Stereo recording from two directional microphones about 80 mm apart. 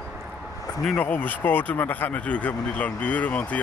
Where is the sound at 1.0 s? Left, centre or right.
Centre.